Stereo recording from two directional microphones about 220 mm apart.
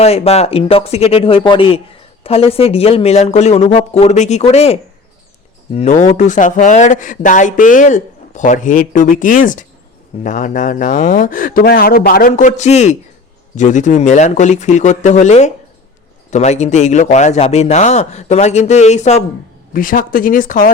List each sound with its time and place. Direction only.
0.0 s speech: 30° left (ahead or behind); by 12.3 s 45° left (ahead or behind)
12.3 s speech: 35° left (ahead or behind)